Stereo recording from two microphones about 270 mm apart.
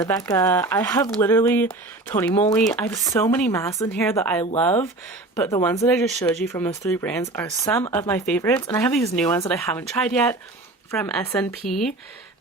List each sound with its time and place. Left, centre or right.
0.0 s speech: centre